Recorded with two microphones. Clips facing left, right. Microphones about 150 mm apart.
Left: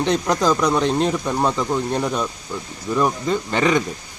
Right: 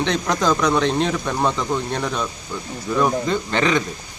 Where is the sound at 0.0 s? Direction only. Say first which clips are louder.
Left 2 dB; 5° left (ahead or behind).